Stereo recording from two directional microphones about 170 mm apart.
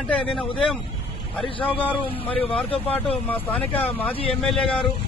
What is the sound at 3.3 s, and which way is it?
Speech, 10° left (ahead or behind).